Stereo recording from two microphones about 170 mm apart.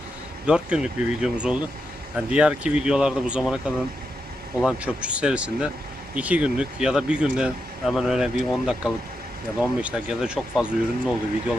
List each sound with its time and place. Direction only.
0.4 s speech: 5° right (ahead or behind)
4.6 s speech: 5° right (ahead or behind)